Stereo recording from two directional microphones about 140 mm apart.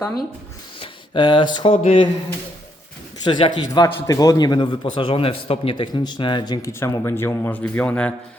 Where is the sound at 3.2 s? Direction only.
30° left (ahead or behind).